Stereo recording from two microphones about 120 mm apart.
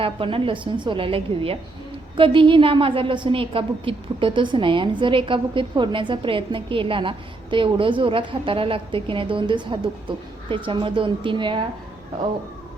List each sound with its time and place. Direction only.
0.0 s a woman's voice: 50° right (ahead or behind)